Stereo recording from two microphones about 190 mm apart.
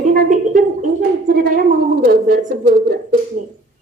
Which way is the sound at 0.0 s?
45° right (ahead or behind).